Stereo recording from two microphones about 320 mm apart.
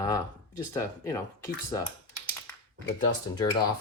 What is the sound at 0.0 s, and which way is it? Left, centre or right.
Speech, centre.